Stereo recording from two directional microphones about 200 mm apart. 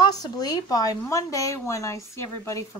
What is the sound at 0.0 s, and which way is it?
A woman's voice, 20° left (ahead or behind).